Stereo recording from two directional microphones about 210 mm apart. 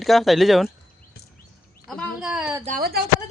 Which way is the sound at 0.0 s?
Centre (ahead or behind).